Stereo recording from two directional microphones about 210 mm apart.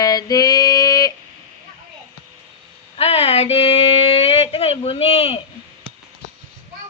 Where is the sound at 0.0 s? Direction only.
20° left (ahead or behind).